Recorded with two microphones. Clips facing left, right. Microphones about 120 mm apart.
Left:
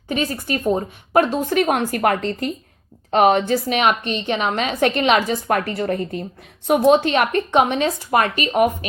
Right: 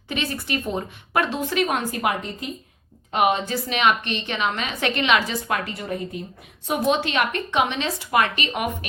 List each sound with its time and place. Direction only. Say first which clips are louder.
0.1 s a woman's voice: left 4 dB; 40° left (ahead or behind)
3.2 s a woman's voice: left 6 dB; 65° left (ahead or behind)
3.5 s a woman's voice: left 3 dB; 50° left (ahead or behind)
6.7 s a woman's voice: left 8 dB; 50° left (ahead or behind)